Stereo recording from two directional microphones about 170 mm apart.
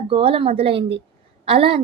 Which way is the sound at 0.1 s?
35° right (ahead or behind).